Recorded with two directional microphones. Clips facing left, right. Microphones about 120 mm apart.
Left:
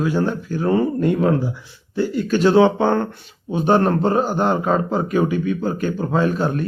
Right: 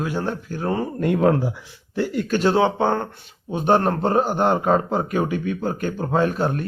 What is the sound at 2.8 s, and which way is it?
Speech, 20° right (ahead or behind).